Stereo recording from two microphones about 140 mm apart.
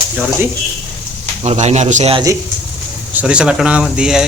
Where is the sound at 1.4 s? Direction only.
55° right (ahead or behind).